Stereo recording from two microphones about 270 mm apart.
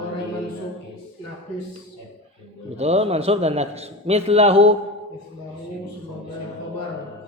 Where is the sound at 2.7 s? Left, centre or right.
Right.